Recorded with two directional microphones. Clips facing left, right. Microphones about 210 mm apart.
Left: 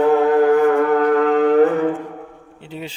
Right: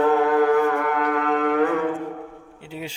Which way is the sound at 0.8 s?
35° left (ahead or behind).